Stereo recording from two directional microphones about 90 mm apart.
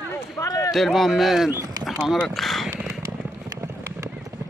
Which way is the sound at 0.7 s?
Centre (ahead or behind).